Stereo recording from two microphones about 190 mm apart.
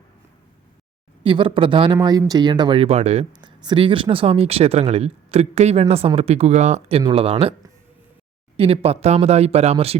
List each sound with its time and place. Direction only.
1.2 s speech: 25° right (ahead or behind)
8.5 s speech: 30° right (ahead or behind)